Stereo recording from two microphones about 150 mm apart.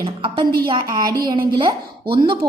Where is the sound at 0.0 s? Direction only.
30° right (ahead or behind).